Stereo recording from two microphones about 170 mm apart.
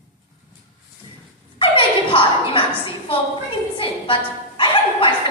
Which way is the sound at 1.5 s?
30° left (ahead or behind).